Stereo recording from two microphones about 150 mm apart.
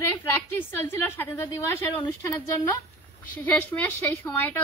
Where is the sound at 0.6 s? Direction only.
15° left (ahead or behind).